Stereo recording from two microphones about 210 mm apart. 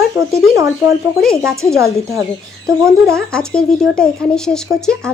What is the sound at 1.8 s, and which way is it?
Speech, 15° right (ahead or behind).